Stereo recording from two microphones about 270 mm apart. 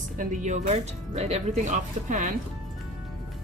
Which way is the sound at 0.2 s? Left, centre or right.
Right.